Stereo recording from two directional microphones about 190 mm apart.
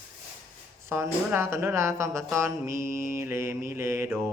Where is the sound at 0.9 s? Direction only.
15° right (ahead or behind).